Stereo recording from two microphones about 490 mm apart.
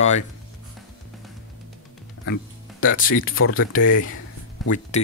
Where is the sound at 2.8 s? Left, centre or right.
Left.